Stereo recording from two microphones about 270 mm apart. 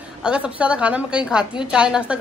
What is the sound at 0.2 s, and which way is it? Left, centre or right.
A woman's voice, centre.